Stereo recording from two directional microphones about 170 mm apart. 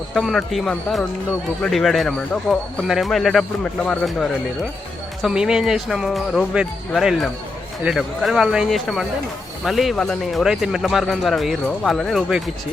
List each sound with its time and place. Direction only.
0.1 s speech: centre (ahead or behind)